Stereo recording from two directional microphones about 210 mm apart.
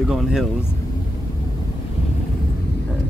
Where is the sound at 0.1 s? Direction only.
Centre (ahead or behind).